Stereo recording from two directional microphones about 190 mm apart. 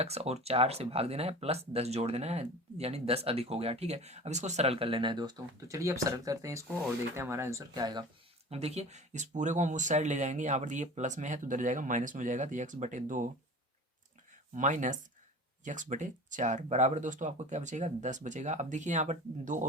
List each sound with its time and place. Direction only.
0.0 s speech: 35° right (ahead or behind)
8.4 s speech: 35° right (ahead or behind)
14.5 s speech: 40° right (ahead or behind)